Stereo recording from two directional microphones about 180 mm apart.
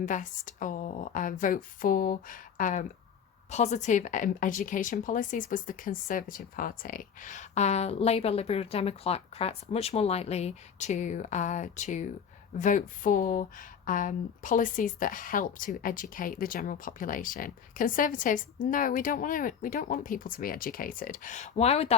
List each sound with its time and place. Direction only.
0.0 s speech: 45° left (ahead or behind)